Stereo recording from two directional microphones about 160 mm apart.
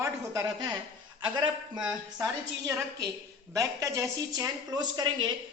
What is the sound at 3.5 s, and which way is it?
Speech, 20° right (ahead or behind).